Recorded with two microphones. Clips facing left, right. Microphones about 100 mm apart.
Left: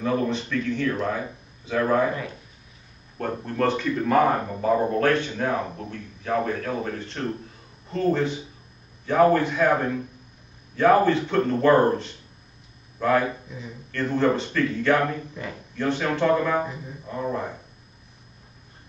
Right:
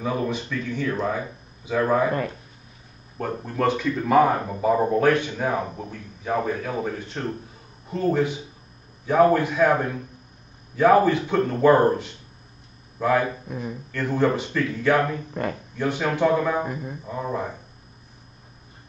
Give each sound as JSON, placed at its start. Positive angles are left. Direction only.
{"t": 0.0, "sound": "speech", "side_deg": -10}
{"t": 3.2, "sound": "speech", "side_deg": -5}
{"t": 10.8, "sound": "speech", "side_deg": -10}
{"t": 13.5, "sound": "speech", "side_deg": -55}
{"t": 13.9, "sound": "speech", "side_deg": -10}
{"t": 15.4, "sound": "speech", "side_deg": -50}
{"t": 15.8, "sound": "speech", "side_deg": -10}
{"t": 16.6, "sound": "speech", "side_deg": -55}
{"t": 17.0, "sound": "speech", "side_deg": 0}